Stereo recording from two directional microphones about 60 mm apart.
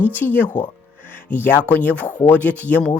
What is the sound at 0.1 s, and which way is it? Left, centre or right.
Speech, left.